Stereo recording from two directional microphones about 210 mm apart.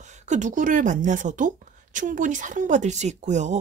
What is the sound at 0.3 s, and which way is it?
Speech, 35° right (ahead or behind).